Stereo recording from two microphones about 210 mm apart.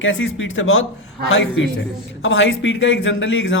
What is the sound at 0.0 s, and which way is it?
A man's voice, 70° left (ahead or behind).